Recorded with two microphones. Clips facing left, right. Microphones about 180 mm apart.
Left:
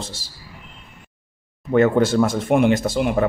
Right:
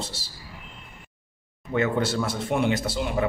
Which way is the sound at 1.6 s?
55° left (ahead or behind).